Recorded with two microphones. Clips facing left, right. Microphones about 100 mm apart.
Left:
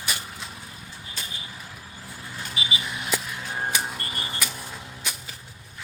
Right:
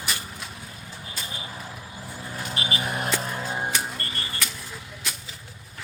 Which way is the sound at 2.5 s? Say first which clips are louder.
Right 3 dB; 50° right (ahead or behind).